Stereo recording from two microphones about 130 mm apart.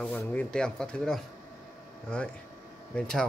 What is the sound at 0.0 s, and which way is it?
Speech, 10° left (ahead or behind).